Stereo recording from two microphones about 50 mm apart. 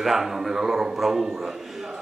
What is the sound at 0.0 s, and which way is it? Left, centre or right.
A man's voice, centre.